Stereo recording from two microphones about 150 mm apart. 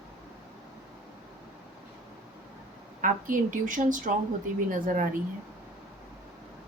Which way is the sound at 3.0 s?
60° right (ahead or behind).